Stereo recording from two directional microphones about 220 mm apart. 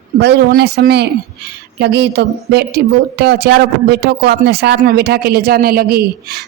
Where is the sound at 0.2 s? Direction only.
45° right (ahead or behind).